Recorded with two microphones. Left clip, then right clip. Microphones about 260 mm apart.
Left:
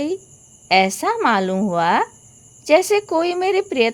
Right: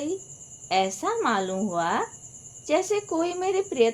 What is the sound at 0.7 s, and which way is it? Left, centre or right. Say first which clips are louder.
Speech: left 8 dB; left.